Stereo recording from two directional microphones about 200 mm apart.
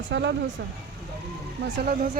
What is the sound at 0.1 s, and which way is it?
Speech, 60° right (ahead or behind).